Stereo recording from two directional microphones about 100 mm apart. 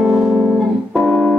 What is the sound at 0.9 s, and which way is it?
Organ, centre (ahead or behind).